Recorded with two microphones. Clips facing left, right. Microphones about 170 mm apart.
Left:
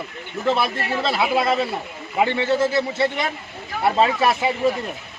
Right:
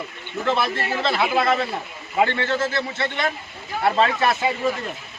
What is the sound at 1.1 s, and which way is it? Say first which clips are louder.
Speech: even; 10° left (ahead or behind).